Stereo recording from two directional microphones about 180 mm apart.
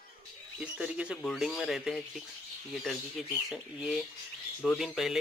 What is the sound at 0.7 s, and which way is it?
Speech, 5° right (ahead or behind).